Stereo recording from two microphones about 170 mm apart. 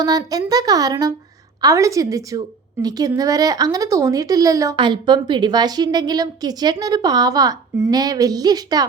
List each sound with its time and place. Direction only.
0.0 s speech: 20° right (ahead or behind)